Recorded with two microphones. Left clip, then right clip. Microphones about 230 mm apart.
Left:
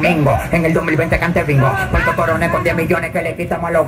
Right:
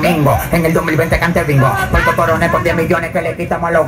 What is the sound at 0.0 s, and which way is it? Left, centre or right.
Speech, right.